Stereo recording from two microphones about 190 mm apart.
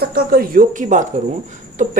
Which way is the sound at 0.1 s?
55° right (ahead or behind).